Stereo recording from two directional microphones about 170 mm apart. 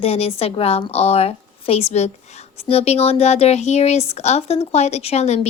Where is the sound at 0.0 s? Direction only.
35° left (ahead or behind).